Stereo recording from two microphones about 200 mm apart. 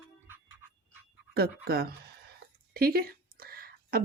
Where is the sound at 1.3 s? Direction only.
50° right (ahead or behind).